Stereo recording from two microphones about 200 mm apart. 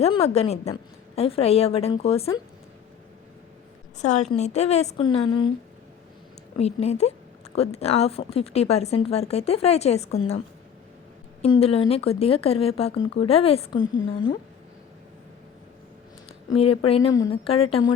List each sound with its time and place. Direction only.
0.0 s speech: 30° left (ahead or behind)
4.0 s speech: 35° left (ahead or behind)
6.6 s speech: 30° left (ahead or behind)
11.4 s speech: 30° left (ahead or behind)
13.7 s a woman's voice: 75° left (ahead or behind)
16.5 s speech: 30° left (ahead or behind)